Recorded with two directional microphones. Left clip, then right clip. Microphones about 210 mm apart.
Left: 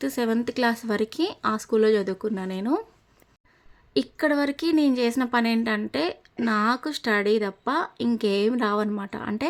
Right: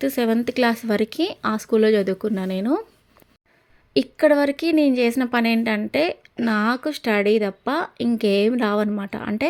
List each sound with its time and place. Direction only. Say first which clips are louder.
0.0 s speech: right 4 dB; 15° right (ahead or behind)
3.9 s speech: right 7 dB; 10° right (ahead or behind)